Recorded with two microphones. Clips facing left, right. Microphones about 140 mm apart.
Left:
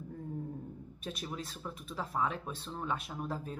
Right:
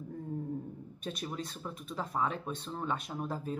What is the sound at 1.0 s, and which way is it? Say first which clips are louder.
Speech: right 2 dB; 5° left (ahead or behind).